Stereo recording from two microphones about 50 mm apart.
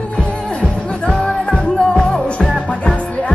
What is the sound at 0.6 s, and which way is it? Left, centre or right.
Music, left.